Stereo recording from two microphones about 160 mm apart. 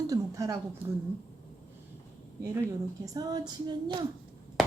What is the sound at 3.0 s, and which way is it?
Speech, 25° right (ahead or behind).